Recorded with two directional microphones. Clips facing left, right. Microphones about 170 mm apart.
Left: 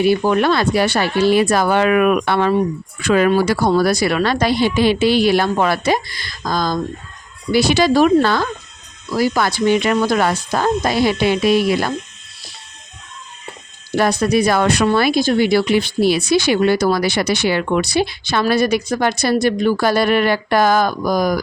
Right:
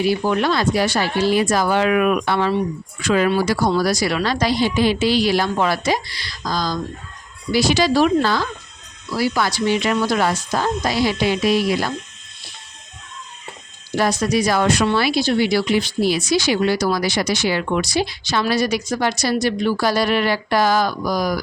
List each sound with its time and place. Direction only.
0.0 s a woman's voice: 55° left (ahead or behind)
13.9 s a woman's voice: 60° left (ahead or behind)
14.8 s speech: 50° left (ahead or behind)